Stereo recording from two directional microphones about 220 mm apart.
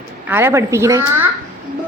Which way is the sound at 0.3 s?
10° right (ahead or behind).